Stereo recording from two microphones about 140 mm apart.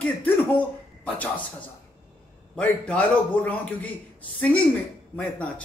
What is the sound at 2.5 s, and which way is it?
A man's voice, 10° left (ahead or behind).